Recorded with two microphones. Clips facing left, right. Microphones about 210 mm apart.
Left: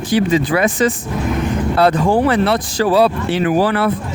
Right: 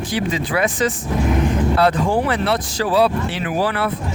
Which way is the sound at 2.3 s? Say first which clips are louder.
Left 4 dB; 45° left (ahead or behind).